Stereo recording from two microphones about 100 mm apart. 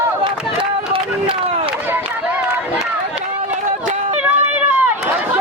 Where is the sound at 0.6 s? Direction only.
60° right (ahead or behind).